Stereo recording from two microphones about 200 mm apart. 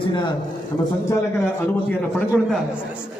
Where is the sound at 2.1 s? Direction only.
5° left (ahead or behind).